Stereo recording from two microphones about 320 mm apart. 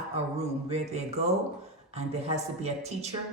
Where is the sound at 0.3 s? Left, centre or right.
Centre.